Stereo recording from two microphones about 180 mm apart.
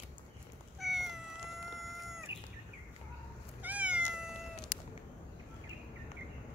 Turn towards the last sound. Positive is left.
turn(degrees=0)  # may be behind; listen again after turning